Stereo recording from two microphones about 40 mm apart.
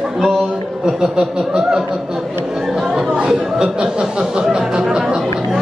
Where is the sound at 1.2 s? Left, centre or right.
Right.